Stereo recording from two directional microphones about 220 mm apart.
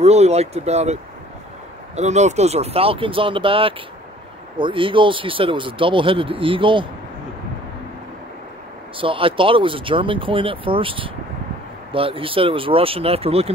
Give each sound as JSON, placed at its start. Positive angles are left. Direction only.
{"t": 0.0, "sound": "speech", "side_deg": -30}
{"t": 2.0, "sound": "speech", "side_deg": -30}
{"t": 8.9, "sound": "speech", "side_deg": -25}